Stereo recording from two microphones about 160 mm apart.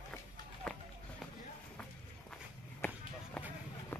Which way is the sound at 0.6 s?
5° left (ahead or behind).